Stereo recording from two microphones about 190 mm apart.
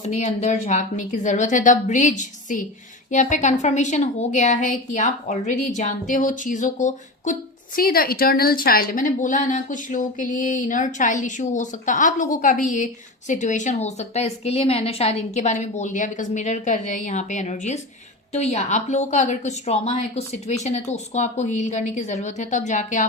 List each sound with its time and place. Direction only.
0.0 s a woman's voice: 35° left (ahead or behind)
7.8 s a woman's voice: 50° left (ahead or behind)